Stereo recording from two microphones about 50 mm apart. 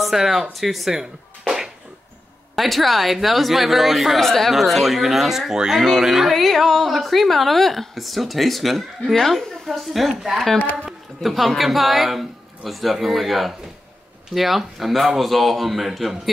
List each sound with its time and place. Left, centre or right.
0.0 s speech: centre
2.5 s speech: centre
10.6 s a man's voice: left
11.2 s speech: centre